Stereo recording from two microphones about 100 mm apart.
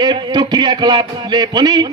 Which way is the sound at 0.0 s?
45° right (ahead or behind).